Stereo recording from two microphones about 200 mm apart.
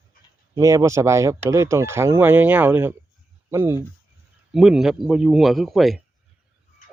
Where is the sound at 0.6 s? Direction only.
15° right (ahead or behind).